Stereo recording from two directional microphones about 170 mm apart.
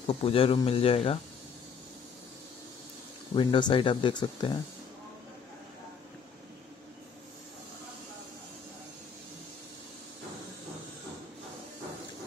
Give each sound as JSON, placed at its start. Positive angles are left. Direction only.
{"t": 0.0, "sound": "speech", "side_deg": 35}
{"t": 3.3, "sound": "speech", "side_deg": 30}